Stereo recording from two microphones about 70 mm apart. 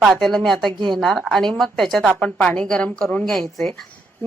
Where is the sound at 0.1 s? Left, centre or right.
Centre.